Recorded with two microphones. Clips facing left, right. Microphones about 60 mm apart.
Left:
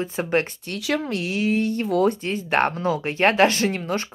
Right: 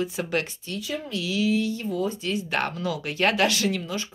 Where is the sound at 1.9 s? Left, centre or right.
Left.